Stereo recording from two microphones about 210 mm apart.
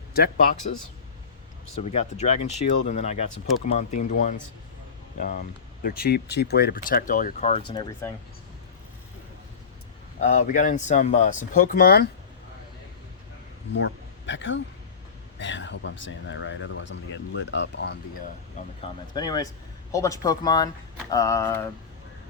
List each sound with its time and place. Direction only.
0.1 s speech: 45° left (ahead or behind)
1.7 s speech: 30° left (ahead or behind)
7.7 s speech: 20° left (ahead or behind)
10.2 s speech: 35° left (ahead or behind)
13.7 s speech: 60° left (ahead or behind)
18.8 s speech: 20° left (ahead or behind)